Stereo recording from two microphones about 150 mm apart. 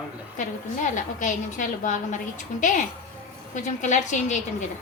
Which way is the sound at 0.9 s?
55° left (ahead or behind).